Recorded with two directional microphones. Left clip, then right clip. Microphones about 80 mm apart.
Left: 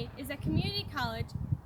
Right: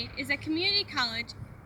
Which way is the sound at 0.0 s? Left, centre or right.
Left.